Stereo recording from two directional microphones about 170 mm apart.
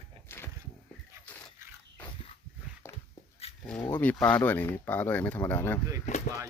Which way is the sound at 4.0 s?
10° left (ahead or behind).